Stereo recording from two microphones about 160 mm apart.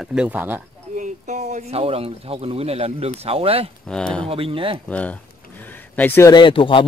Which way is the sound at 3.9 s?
5° left (ahead or behind).